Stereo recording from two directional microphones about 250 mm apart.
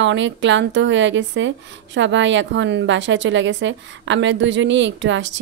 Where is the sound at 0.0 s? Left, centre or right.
Right.